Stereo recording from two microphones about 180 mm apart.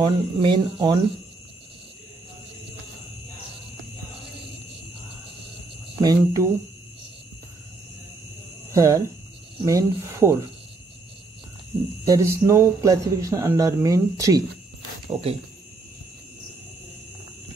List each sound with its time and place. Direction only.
0.0 s speech: 30° right (ahead or behind)
5.9 s speech: 20° right (ahead or behind)
8.7 s speech: 15° right (ahead or behind)
12.0 s speech: 20° right (ahead or behind)
15.0 s speech: 35° right (ahead or behind)